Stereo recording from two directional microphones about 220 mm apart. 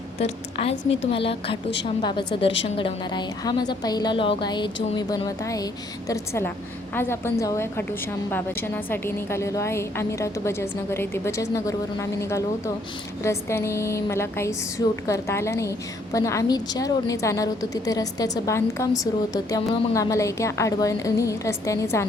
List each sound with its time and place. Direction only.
0.2 s a woman's voice: 25° left (ahead or behind)